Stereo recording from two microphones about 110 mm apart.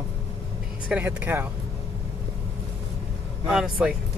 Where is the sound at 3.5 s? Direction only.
5° right (ahead or behind).